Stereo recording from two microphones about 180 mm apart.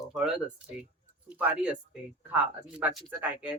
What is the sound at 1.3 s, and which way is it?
Speech, 5° right (ahead or behind).